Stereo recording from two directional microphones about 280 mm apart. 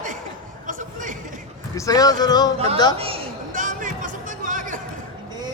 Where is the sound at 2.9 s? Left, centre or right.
Right.